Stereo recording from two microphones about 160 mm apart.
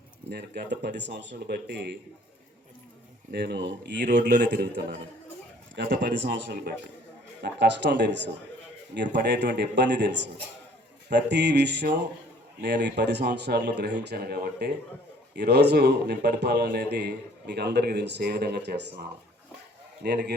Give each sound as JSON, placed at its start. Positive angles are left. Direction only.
{"t": 0.3, "sound": "a man's voice", "side_deg": -85}
{"t": 3.3, "sound": "a man's voice", "side_deg": -90}